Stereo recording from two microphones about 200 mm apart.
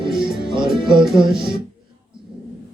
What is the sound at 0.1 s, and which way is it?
Music, 25° right (ahead or behind).